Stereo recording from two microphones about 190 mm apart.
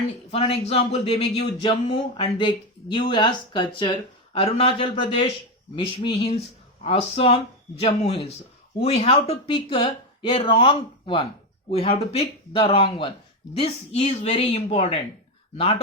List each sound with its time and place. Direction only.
0.3 s speech: 30° left (ahead or behind)